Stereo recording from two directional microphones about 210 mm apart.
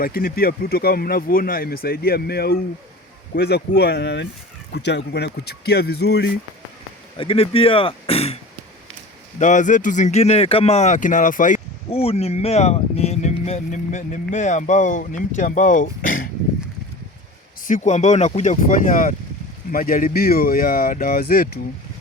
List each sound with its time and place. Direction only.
0.0 s speech: 45° left (ahead or behind)
7.2 s speech: 25° left (ahead or behind)
9.4 s speech: 35° left (ahead or behind)
17.6 s speech: 35° left (ahead or behind)